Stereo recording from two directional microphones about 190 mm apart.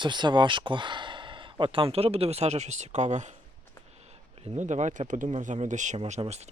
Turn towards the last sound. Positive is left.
turn(degrees=-35)  # may be behind; listen again after turning